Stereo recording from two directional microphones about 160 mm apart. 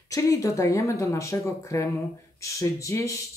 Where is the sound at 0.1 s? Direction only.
20° left (ahead or behind).